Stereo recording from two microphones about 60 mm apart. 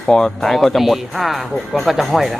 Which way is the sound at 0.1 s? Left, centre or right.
Centre.